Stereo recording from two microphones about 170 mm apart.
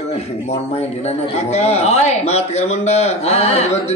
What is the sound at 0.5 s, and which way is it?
A man's voice, 40° left (ahead or behind).